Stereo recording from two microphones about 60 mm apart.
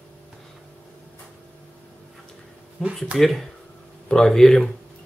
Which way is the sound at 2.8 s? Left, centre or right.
Centre.